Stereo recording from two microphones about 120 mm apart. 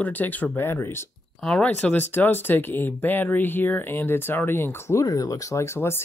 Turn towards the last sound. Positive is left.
turn(degrees=20)  # may be behind; listen again after turning